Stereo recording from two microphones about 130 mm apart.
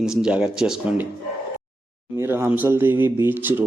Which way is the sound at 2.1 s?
20° right (ahead or behind).